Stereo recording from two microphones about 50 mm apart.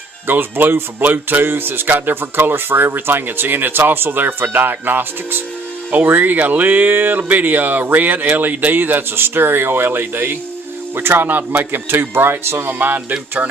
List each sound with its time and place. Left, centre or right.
0.3 s speech: right